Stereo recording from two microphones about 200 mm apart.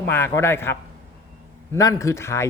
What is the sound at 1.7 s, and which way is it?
Speech, 15° left (ahead or behind).